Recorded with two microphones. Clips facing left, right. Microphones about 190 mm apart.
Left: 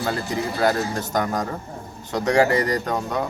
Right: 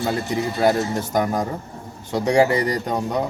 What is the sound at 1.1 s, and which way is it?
A man's voice, 10° right (ahead or behind).